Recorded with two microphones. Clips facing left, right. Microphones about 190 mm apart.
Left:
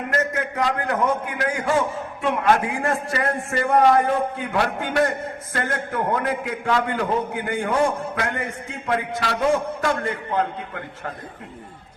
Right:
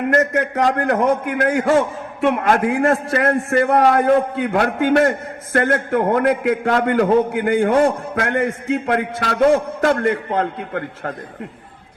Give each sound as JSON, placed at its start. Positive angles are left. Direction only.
{"t": 0.1, "sound": "a man's voice", "side_deg": -55}
{"t": 1.0, "sound": "a man's voice", "side_deg": -70}